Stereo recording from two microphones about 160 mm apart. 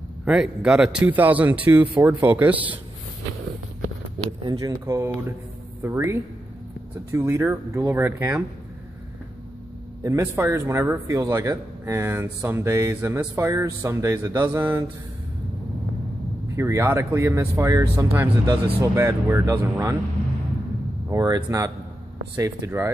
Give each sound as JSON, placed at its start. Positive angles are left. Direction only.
{"t": 0.2, "sound": "a man's voice", "side_deg": -5}
{"t": 4.5, "sound": "a man's voice", "side_deg": -25}
{"t": 10.0, "sound": "a man's voice", "side_deg": -15}
{"t": 16.4, "sound": "a man's voice", "side_deg": -20}
{"t": 21.1, "sound": "a man's voice", "side_deg": -25}